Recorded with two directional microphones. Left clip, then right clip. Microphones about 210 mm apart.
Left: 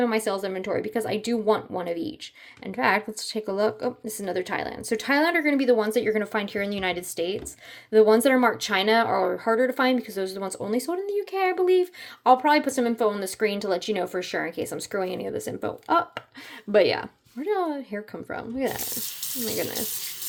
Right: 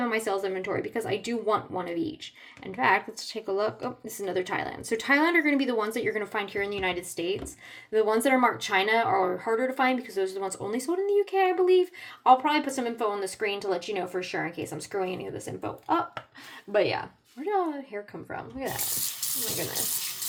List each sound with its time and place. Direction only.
0.0 s speech: 30° left (ahead or behind)